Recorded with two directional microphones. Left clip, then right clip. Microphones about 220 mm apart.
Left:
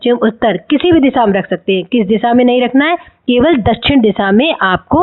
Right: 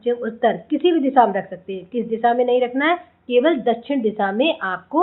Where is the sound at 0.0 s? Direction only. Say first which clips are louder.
Left 8 dB; 45° left (ahead or behind).